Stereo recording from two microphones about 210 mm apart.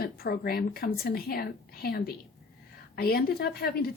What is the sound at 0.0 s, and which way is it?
A woman's voice, 45° left (ahead or behind).